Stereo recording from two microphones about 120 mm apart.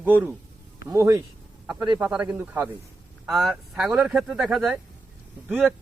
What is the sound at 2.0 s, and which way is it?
Speech, 10° right (ahead or behind).